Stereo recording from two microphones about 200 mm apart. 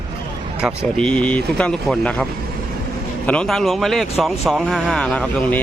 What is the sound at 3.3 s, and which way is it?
Speech, 5° left (ahead or behind).